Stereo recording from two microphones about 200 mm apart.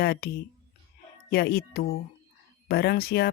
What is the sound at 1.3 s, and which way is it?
Speech, 50° left (ahead or behind).